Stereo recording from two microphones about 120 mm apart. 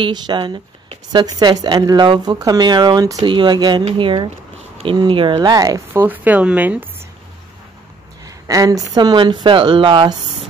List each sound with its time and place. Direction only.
0.0 s speech: 40° right (ahead or behind)
5.4 s speech: 30° right (ahead or behind)
5.9 s speech: 15° right (ahead or behind)
8.3 s speech: 30° right (ahead or behind)